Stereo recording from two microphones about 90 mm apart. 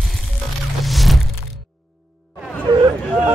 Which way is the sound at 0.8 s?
Centre (ahead or behind).